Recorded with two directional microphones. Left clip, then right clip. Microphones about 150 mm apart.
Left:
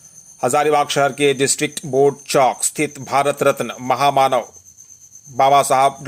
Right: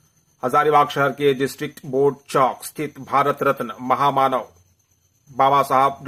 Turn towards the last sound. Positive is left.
turn(degrees=30)  # may be behind; listen again after turning